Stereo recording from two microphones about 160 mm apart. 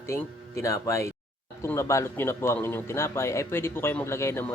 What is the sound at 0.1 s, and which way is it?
A man's voice, 20° left (ahead or behind).